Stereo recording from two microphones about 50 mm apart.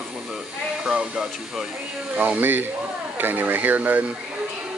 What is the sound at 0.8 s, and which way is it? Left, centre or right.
Speech, centre.